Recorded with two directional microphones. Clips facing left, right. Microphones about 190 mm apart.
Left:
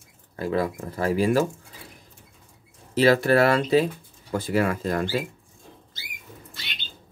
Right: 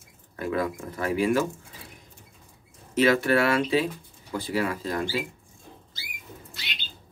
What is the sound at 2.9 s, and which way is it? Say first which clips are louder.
Speech: left 3 dB; 35° left (ahead or behind).